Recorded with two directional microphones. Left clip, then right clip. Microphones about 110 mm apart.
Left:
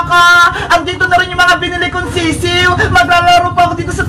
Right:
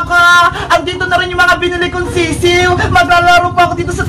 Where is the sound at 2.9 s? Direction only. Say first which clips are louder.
Right 1 dB; 20° right (ahead or behind).